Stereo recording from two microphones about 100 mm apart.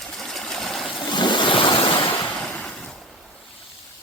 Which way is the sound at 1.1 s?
50° left (ahead or behind).